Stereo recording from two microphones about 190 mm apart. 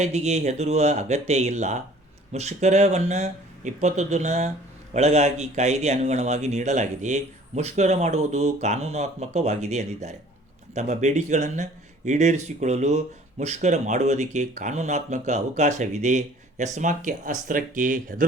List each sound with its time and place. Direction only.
0.0 s speech: 35° right (ahead or behind)